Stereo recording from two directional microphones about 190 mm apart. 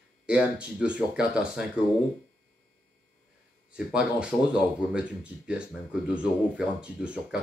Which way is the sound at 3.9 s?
5° right (ahead or behind).